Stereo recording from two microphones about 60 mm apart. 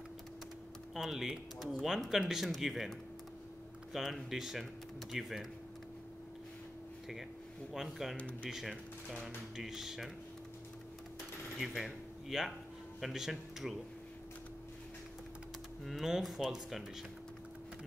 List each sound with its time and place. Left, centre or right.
0.9 s speech: centre
3.9 s speech: centre
7.7 s speech: centre
8.2 s speech: left
8.5 s speech: centre
11.5 s a sound: centre
13.0 s speech: centre
15.8 s speech: centre